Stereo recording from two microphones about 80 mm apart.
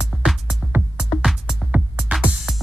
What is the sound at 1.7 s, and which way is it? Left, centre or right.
Music, centre.